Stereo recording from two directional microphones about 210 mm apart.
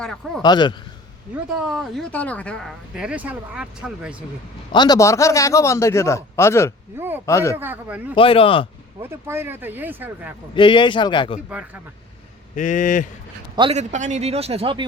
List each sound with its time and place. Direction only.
0.0 s speech: 5° left (ahead or behind)
0.4 s speech: 20° left (ahead or behind)
1.6 s speech: centre (ahead or behind)
4.7 s a man's voice: 20° left (ahead or behind)
6.9 s speech: 10° right (ahead or behind)
7.3 s a man's voice: 15° left (ahead or behind)
7.5 s speech: 10° right (ahead or behind)
8.1 s speech: 25° left (ahead or behind)
9.0 s speech: 10° right (ahead or behind)
10.5 s speech: 25° left (ahead or behind)
11.4 s speech: 5° right (ahead or behind)
12.5 s speech: 35° left (ahead or behind)
13.6 s a man's voice: 30° right (ahead or behind)